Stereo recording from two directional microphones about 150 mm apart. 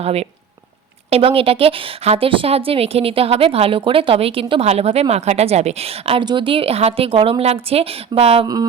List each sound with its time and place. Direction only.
0.0 s speech: 45° right (ahead or behind)